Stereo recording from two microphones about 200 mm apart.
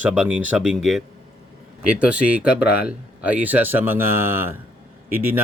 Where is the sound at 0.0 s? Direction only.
5° right (ahead or behind).